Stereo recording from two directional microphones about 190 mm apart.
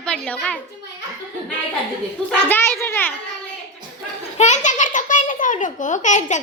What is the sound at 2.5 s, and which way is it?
Speech, 10° left (ahead or behind).